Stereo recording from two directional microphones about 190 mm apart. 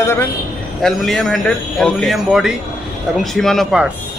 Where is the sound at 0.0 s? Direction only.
10° left (ahead or behind).